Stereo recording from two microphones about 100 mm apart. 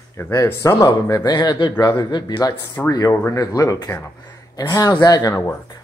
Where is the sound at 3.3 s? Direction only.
35° left (ahead or behind).